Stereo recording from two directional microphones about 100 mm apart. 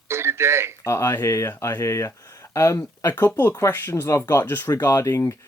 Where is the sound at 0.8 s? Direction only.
30° left (ahead or behind).